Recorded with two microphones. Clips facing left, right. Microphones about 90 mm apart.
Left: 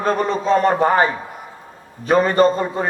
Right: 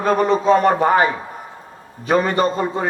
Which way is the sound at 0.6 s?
35° left (ahead or behind).